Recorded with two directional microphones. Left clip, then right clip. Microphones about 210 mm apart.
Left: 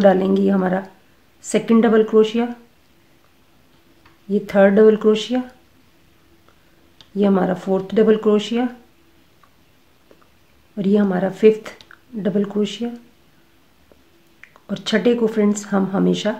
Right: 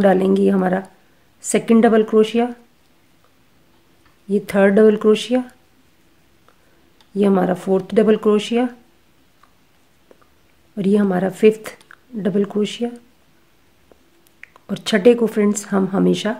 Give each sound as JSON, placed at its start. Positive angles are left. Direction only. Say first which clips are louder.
{"t": 0.0, "sound": "speech", "louder": "even", "side_deg": -35}
{"t": 4.3, "sound": "speech", "louder": "left 1 dB", "side_deg": -35}
{"t": 7.2, "sound": "speech", "louder": "right 1 dB", "side_deg": -35}
{"t": 10.8, "sound": "speech", "louder": "right 1 dB", "side_deg": -35}
{"t": 14.4, "sound": "speech", "louder": "right 1 dB", "side_deg": -35}